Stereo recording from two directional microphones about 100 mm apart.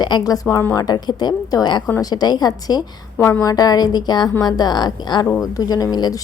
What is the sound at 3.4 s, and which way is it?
A woman's voice, 40° left (ahead or behind).